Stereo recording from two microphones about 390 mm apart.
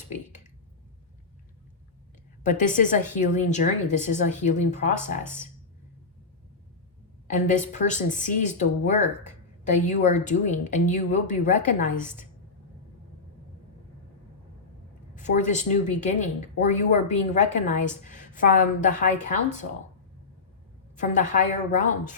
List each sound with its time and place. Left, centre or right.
2.4 s a woman's voice: centre
7.3 s a woman's voice: centre
15.1 s a woman's voice: centre
20.9 s a woman's voice: centre